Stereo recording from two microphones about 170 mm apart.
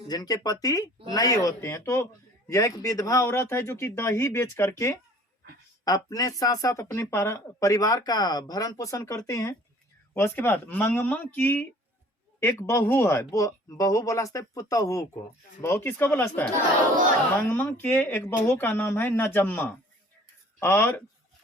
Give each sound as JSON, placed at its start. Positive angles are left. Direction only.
{"t": 0.1, "sound": "speech", "side_deg": 20}
{"t": 17.5, "sound": "speech", "side_deg": 10}